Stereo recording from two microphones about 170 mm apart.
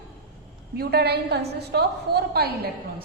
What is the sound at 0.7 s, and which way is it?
A woman's voice, 70° right (ahead or behind).